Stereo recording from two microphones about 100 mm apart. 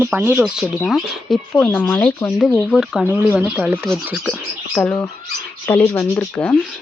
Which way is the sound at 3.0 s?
20° right (ahead or behind).